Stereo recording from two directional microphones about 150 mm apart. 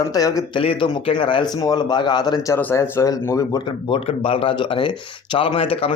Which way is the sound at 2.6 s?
15° left (ahead or behind).